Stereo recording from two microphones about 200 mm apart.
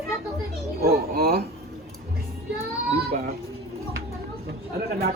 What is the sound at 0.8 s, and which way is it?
Speech, 50° right (ahead or behind).